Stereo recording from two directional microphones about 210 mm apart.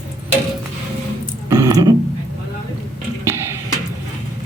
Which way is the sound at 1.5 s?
15° right (ahead or behind).